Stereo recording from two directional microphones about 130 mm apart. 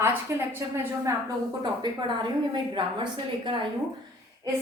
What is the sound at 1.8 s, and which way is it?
Speech, 35° right (ahead or behind).